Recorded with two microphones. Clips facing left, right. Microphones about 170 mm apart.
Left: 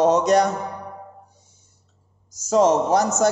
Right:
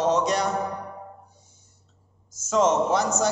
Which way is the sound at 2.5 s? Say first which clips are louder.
Left 4 dB; 35° left (ahead or behind).